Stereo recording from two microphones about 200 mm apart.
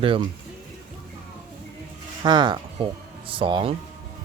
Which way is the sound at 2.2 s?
25° right (ahead or behind).